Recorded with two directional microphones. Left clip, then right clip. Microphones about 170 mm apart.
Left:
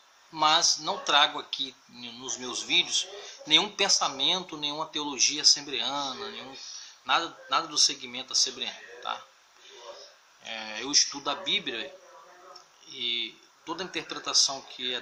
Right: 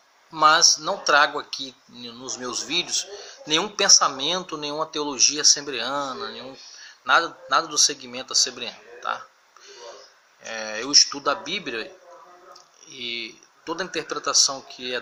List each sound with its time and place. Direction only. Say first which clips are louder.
0.3 s speech: right 7 dB; 5° left (ahead or behind)
10.4 s speech: right 6 dB; 10° left (ahead or behind)
12.9 s speech: even; 5° left (ahead or behind)